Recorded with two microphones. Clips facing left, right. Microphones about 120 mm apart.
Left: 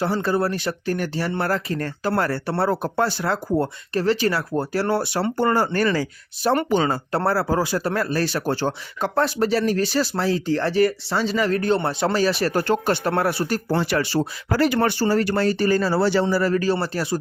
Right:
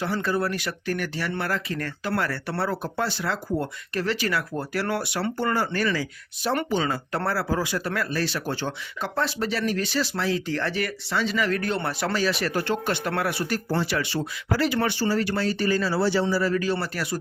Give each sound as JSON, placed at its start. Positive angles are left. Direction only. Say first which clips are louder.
{"t": 0.0, "sound": "speech", "louder": "left 4 dB", "side_deg": 35}
{"t": 6.9, "sound": "speech", "louder": "left 5 dB", "side_deg": 35}
{"t": 12.2, "sound": "speech", "louder": "left 4 dB", "side_deg": 35}
{"t": 13.7, "sound": "speech", "louder": "left 6 dB", "side_deg": 45}
{"t": 16.7, "sound": "speech", "louder": "left 5 dB", "side_deg": 30}